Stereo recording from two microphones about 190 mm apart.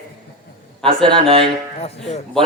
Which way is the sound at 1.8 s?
35° left (ahead or behind).